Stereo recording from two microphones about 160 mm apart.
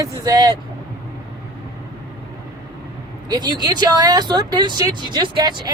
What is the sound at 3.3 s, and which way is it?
Speech, 25° right (ahead or behind).